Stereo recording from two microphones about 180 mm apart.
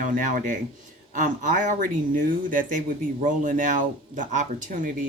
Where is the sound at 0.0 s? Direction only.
45° right (ahead or behind).